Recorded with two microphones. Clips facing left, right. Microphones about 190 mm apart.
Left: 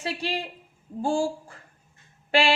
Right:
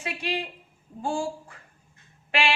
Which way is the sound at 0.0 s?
35° left (ahead or behind).